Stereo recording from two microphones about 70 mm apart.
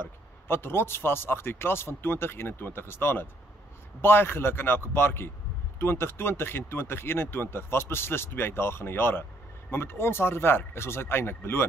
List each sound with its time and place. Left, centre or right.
0.0 s speech: left